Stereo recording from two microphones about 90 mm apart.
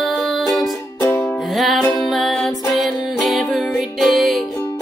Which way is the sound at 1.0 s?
25° left (ahead or behind).